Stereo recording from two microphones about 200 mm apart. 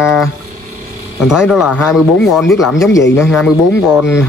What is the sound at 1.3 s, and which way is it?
Speech, 5° right (ahead or behind).